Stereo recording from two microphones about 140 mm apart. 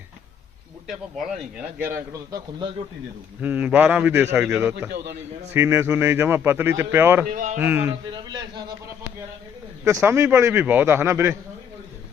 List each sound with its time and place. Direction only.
1.8 s a man's voice: 20° right (ahead or behind)
3.4 s a man's voice: 10° right (ahead or behind)
7.3 s speech: 65° right (ahead or behind)
7.6 s a man's voice: 15° right (ahead or behind)
8.1 s a man's voice: 30° right (ahead or behind)
9.8 s a man's voice: 20° right (ahead or behind)